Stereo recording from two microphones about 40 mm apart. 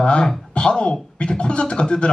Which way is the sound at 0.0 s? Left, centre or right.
Left.